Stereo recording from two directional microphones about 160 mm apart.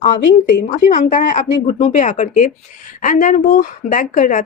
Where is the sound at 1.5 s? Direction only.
35° left (ahead or behind).